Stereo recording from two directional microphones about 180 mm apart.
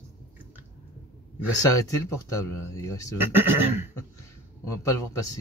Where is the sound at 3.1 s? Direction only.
10° right (ahead or behind).